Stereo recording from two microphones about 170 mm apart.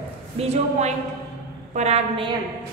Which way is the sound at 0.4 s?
40° right (ahead or behind).